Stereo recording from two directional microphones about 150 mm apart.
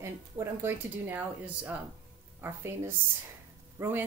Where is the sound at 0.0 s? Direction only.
15° right (ahead or behind).